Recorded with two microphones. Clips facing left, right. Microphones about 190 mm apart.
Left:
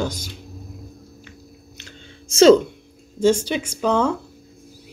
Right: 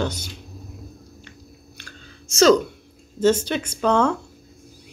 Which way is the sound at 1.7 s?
25° left (ahead or behind).